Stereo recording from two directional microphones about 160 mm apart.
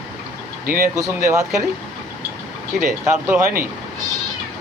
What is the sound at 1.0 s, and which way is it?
Speech, 20° right (ahead or behind).